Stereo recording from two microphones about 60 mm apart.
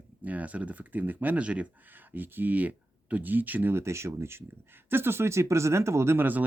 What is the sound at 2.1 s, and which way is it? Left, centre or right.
Speech, right.